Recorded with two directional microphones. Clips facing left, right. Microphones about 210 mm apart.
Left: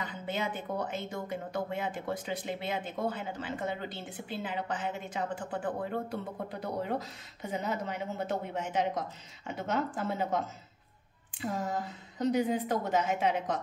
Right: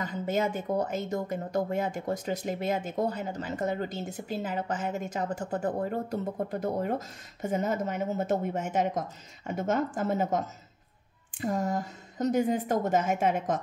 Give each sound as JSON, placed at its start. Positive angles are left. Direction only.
{"t": 0.0, "sound": "speech", "side_deg": -45}